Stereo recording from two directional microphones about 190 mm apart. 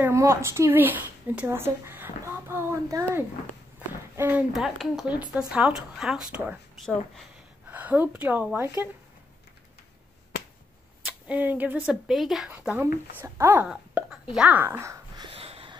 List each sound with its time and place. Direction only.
0.0 s speech: 15° right (ahead or behind)
7.7 s speech: 10° right (ahead or behind)
11.1 s speech: 10° right (ahead or behind)
15.2 s a sound: 30° right (ahead or behind)